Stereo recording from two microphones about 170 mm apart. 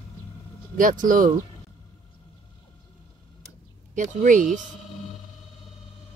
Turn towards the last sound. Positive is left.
turn(degrees=-50)  # may be behind; listen again after turning